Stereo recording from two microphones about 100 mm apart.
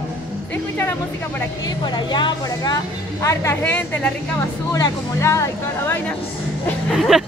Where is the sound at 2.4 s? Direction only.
35° left (ahead or behind).